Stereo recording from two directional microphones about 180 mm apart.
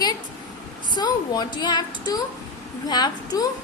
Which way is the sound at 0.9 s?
25° left (ahead or behind).